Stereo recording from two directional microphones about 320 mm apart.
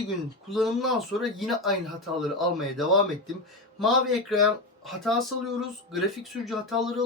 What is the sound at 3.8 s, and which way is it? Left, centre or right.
Speech, centre.